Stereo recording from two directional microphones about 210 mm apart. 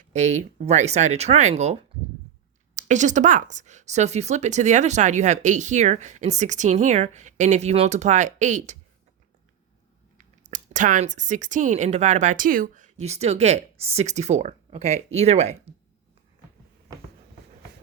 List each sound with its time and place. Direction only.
0.1 s speech: 35° right (ahead or behind)
10.2 s speech: 35° right (ahead or behind)